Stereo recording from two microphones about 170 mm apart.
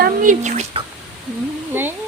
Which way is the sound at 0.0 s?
50° right (ahead or behind).